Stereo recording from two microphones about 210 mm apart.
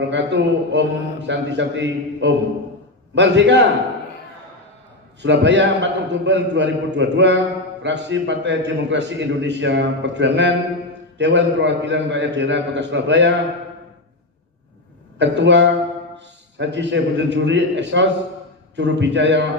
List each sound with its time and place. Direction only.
0.0 s a man's voice: 55° right (ahead or behind)
5.2 s a man's voice: 55° right (ahead or behind)
15.1 s a man's voice: 55° right (ahead or behind)